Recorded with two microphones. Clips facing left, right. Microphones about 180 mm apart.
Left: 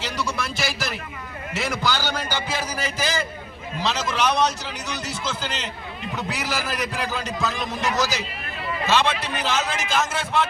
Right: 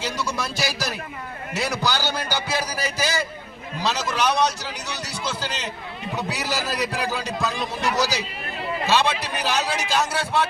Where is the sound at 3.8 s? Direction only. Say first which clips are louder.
Even; 10° right (ahead or behind).